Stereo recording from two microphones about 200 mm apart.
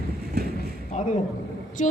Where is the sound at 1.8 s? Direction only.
40° left (ahead or behind).